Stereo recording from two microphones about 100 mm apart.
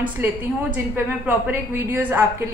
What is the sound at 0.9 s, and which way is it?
Speech, 20° right (ahead or behind).